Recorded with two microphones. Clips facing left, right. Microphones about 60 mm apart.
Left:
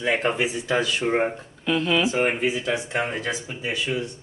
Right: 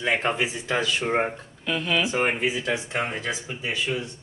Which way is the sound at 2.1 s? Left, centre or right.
Right.